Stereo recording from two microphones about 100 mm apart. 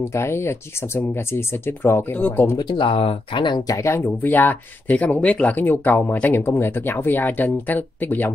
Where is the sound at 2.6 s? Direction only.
55° left (ahead or behind).